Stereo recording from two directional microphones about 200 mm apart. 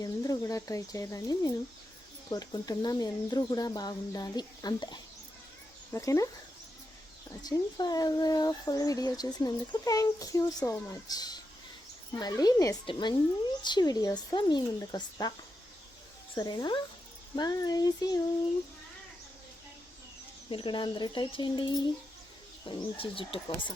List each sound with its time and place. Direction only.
0.0 s speech: 15° left (ahead or behind)
7.4 s speech: 20° left (ahead or behind)
16.3 s speech: 20° left (ahead or behind)
20.5 s speech: 25° left (ahead or behind)
23.0 s speech: 25° left (ahead or behind)